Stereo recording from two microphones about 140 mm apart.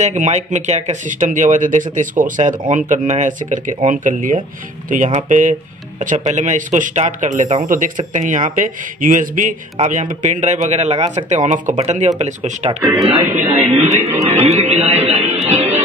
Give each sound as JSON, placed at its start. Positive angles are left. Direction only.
{"t": 0.0, "sound": "speech", "side_deg": -55}
{"t": 7.6, "sound": "speech", "side_deg": -80}
{"t": 8.1, "sound": "speech", "side_deg": -65}